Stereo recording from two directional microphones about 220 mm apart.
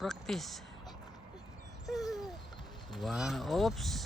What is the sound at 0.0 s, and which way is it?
Speech, centre (ahead or behind).